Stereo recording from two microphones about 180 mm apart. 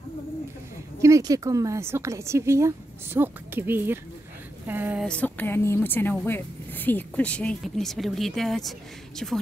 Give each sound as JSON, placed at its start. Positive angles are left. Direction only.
{"t": 1.0, "sound": "a woman's voice", "side_deg": -20}
{"t": 5.0, "sound": "speech", "side_deg": 5}